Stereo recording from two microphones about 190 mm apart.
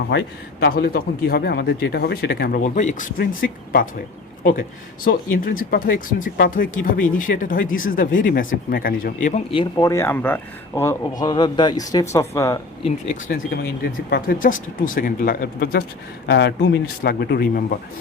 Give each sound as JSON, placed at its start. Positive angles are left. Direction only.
{"t": 0.1, "sound": "speech", "side_deg": 60}
{"t": 5.5, "sound": "speech", "side_deg": 50}
{"t": 9.7, "sound": "a man's voice", "side_deg": 15}
{"t": 13.3, "sound": "speech", "side_deg": 50}
{"t": 16.2, "sound": "speech", "side_deg": 65}